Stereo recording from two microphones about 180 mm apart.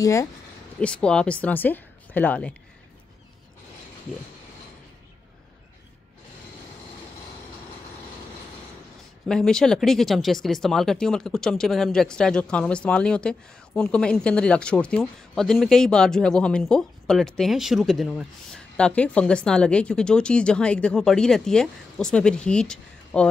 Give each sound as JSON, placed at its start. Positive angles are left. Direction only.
{"t": 0.0, "sound": "speech", "side_deg": 15}
{"t": 0.7, "sound": "speech", "side_deg": 5}
{"t": 9.3, "sound": "speech", "side_deg": 5}